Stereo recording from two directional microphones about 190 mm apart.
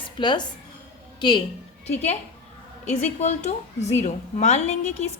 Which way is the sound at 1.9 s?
35° left (ahead or behind).